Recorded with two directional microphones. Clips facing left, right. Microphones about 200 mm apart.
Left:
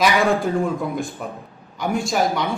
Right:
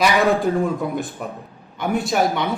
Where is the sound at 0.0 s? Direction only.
Centre (ahead or behind).